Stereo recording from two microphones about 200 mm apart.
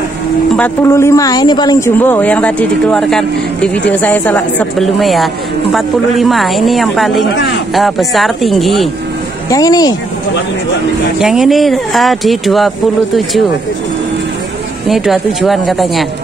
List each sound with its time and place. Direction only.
0.6 s speech: 15° left (ahead or behind)
2.0 s a woman's voice: 10° left (ahead or behind)
9.5 s speech: 20° left (ahead or behind)
11.1 s a woman's voice: 5° right (ahead or behind)
14.9 s a woman's voice: centre (ahead or behind)